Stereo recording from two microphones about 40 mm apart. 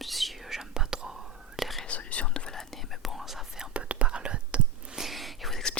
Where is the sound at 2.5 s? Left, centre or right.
Centre.